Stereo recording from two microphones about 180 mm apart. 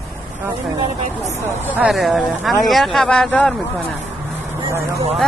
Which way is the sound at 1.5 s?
10° left (ahead or behind).